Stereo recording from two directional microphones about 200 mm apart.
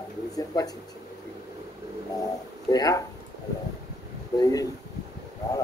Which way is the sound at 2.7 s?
20° left (ahead or behind).